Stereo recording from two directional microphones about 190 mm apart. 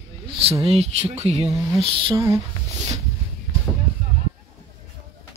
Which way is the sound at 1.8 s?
25° right (ahead or behind).